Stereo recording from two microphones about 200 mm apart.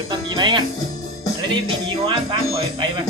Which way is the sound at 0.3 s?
25° right (ahead or behind).